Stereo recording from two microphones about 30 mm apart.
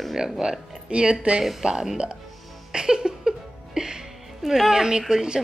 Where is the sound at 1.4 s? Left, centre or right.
Centre.